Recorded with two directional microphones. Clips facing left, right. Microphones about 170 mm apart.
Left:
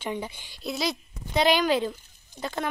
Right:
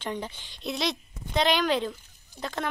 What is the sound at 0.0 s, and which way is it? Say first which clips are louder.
Speech: left 1 dB; 10° left (ahead or behind).